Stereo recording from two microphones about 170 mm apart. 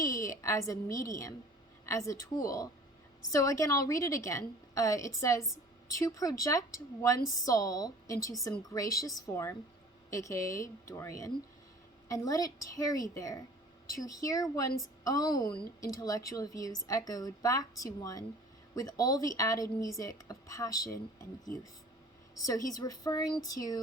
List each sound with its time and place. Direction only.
0.0 s a woman's voice: 20° left (ahead or behind)
22.4 s speech: 20° left (ahead or behind)